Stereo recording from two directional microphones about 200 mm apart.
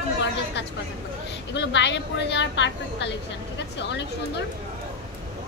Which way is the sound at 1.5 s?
60° left (ahead or behind).